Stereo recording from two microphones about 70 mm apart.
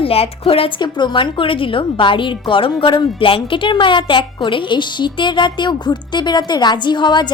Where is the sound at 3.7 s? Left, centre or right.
Left.